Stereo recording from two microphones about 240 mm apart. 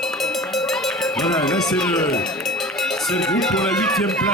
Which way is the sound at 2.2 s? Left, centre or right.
Centre.